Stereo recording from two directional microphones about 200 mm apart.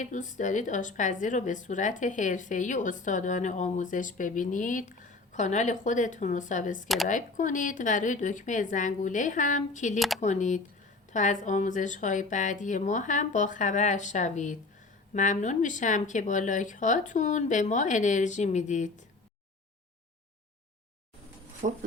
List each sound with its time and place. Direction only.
0.0 s a woman's voice: 40° left (ahead or behind)
6.8 s speech: centre (ahead or behind)
7.1 s a woman's voice: 40° left (ahead or behind)
21.6 s speech: 40° right (ahead or behind)